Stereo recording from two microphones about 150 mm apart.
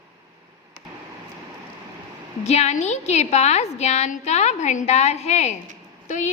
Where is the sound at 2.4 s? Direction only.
50° left (ahead or behind).